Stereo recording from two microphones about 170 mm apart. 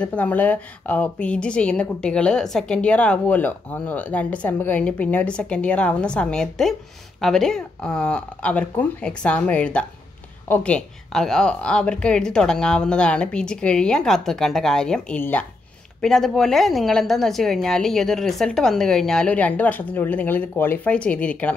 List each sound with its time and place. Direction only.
0.0 s a woman's voice: 10° left (ahead or behind)